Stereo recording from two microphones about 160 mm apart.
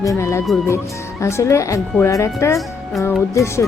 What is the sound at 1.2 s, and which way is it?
Speech, 20° left (ahead or behind).